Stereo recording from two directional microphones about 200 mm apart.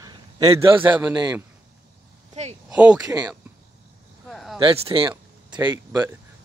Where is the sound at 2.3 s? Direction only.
35° right (ahead or behind).